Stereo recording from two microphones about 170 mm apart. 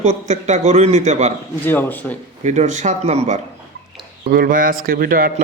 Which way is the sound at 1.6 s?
10° left (ahead or behind).